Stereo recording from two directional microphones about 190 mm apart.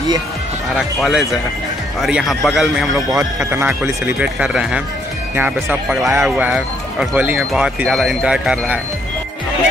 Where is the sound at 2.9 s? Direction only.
15° right (ahead or behind).